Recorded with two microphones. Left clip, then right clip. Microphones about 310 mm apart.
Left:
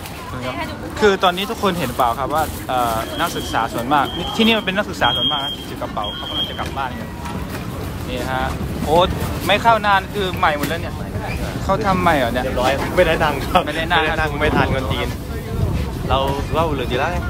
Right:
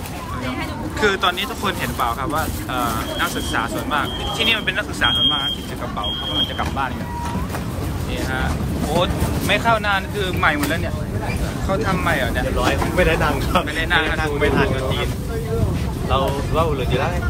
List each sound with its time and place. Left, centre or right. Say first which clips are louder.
1.0 s speech: left 3 dB; centre
8.9 s speech: left 5 dB; centre
12.9 s speech: left 4 dB; left
13.7 s speech: left 1 dB; centre
14.2 s speech: left 1 dB; left
16.1 s speech: left 1 dB; left